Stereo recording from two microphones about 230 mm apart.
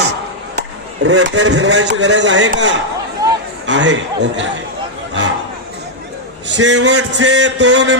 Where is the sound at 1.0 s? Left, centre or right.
Right.